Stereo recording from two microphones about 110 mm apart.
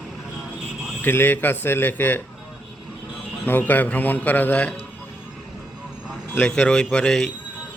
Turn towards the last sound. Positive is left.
turn(degrees=5)  # may be behind; listen again after turning